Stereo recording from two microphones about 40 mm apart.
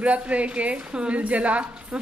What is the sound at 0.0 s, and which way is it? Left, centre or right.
A woman's voice, right.